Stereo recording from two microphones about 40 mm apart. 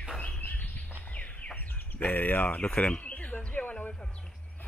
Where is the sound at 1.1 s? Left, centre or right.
Left.